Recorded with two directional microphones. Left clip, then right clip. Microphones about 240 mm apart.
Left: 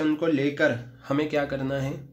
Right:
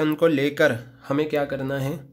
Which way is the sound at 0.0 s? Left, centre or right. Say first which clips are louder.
Right 4 dB; right.